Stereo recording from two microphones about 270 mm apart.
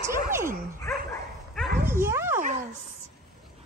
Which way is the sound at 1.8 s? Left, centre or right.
Centre.